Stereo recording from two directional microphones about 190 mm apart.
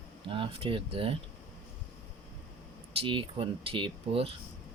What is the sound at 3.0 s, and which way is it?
Speech, 25° right (ahead or behind).